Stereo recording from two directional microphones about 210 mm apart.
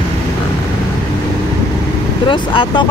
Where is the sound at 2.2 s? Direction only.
20° left (ahead or behind).